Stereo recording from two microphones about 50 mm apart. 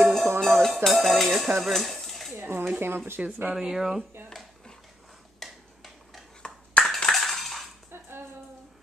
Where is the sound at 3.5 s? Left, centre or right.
Centre.